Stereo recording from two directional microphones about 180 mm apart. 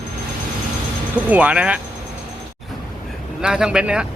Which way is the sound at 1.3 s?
5° right (ahead or behind).